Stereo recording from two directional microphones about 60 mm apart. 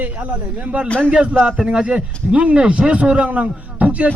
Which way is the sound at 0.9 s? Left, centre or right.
Centre.